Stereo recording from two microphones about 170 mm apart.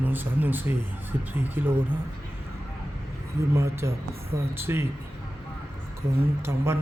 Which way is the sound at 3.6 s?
15° right (ahead or behind).